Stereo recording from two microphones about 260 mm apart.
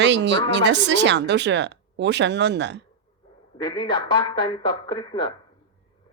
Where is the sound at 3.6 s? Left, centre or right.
Centre.